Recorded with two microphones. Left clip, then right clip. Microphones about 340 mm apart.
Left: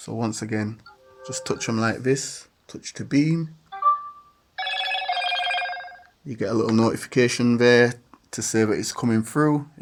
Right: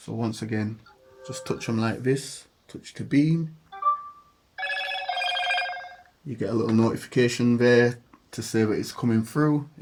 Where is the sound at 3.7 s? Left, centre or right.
Centre.